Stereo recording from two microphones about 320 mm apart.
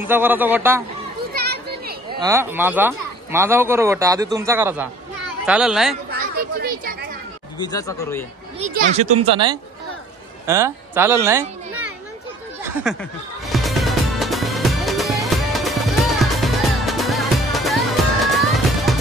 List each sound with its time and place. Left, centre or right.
0.1 s speech: centre
2.1 s a child's voice: centre
6.1 s a sound: right
7.5 s speech: centre
8.5 s speech: right
12.9 s a child's voice: centre
13.5 s music: centre